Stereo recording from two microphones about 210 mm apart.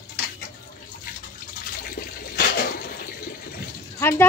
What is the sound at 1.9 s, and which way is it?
Water, 45° left (ahead or behind).